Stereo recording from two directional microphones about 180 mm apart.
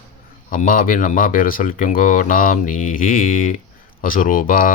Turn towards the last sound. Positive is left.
turn(degrees=50)  # may be behind; listen again after turning